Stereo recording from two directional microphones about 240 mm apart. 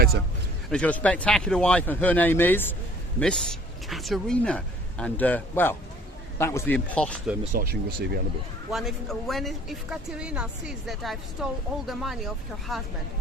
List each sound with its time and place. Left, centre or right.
0.7 s speech: centre
7.5 s speech: right
8.7 s speech: centre